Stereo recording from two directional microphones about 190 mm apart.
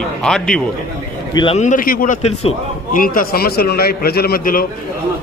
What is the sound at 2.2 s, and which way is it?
Speech, 35° left (ahead or behind).